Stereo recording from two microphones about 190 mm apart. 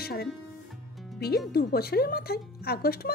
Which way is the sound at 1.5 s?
55° left (ahead or behind).